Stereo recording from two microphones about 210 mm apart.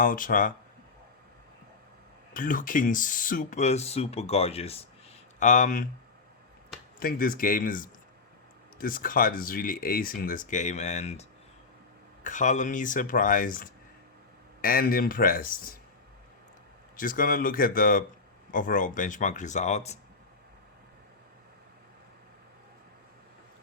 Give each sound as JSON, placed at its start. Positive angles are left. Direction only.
{"t": 0.0, "sound": "speech", "side_deg": 40}
{"t": 2.3, "sound": "speech", "side_deg": 40}
{"t": 7.0, "sound": "speech", "side_deg": 40}
{"t": 17.0, "sound": "speech", "side_deg": 40}